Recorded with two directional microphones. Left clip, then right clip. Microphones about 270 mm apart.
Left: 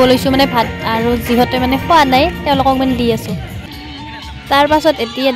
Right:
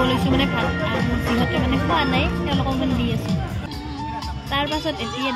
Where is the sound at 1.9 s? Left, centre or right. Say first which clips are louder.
Left 13 dB; left.